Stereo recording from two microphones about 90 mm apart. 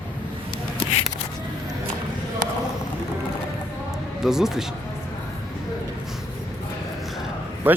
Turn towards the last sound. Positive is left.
turn(degrees=-20)  # may be behind; listen again after turning